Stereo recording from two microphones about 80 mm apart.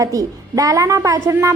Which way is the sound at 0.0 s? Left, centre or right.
Right.